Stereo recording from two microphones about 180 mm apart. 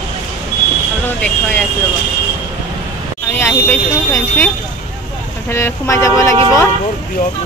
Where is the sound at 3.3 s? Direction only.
10° left (ahead or behind).